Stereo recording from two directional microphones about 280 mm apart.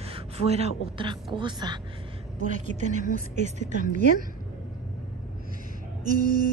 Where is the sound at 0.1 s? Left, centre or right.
Right.